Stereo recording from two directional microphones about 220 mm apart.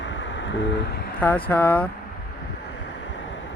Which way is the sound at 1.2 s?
10° left (ahead or behind).